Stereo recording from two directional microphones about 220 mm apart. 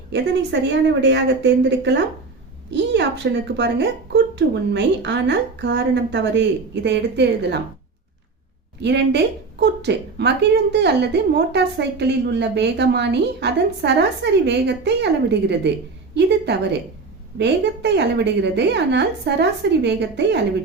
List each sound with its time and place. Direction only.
0.1 s a woman's voice: 50° right (ahead or behind)
8.8 s a woman's voice: 50° right (ahead or behind)
17.3 s a woman's voice: 50° right (ahead or behind)